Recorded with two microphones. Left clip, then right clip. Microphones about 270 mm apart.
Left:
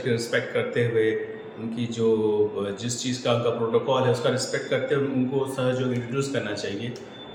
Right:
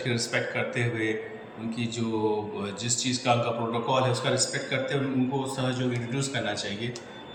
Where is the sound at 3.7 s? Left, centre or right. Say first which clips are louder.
Left 4 dB; centre.